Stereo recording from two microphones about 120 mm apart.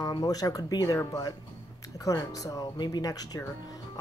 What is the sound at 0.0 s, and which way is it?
Speech, 35° left (ahead or behind).